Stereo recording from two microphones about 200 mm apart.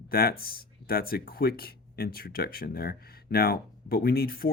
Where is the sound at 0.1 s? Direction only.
50° left (ahead or behind).